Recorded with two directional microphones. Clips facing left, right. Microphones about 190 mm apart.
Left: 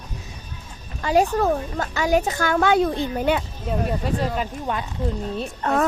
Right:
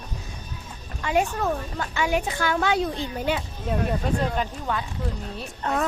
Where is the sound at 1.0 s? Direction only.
35° left (ahead or behind); by 3.3 s 55° left (ahead or behind).